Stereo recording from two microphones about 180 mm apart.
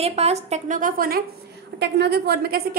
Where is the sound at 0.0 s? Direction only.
35° right (ahead or behind); by 1.2 s 55° right (ahead or behind).